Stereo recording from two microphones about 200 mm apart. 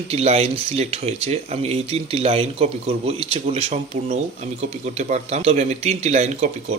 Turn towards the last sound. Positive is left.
turn(degrees=-35)  # may be behind; listen again after turning